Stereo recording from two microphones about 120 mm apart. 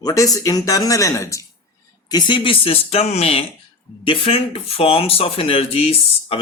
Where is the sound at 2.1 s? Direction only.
40° left (ahead or behind); by 6.3 s 55° left (ahead or behind).